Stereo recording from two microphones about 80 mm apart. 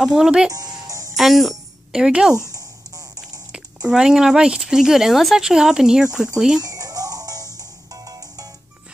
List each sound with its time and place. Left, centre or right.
0.0 s speech: centre
0.5 s speech: right
0.8 s music: right
1.1 s speech: centre
2.5 s a sound: right
3.5 s speech: centre
6.6 s music: right